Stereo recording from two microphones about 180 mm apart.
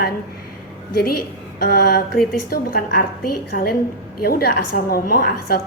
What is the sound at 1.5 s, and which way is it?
A woman's voice, 55° left (ahead or behind).